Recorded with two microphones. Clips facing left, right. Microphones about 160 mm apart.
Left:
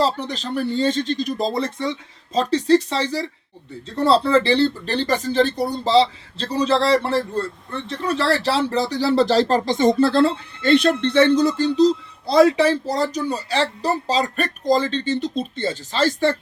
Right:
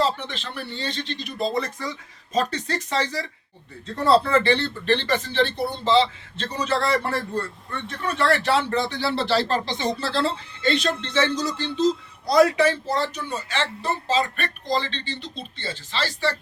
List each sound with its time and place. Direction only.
0.0 s speech: 40° left (ahead or behind)